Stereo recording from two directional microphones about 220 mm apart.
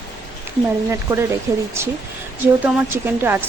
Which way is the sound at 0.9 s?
15° right (ahead or behind).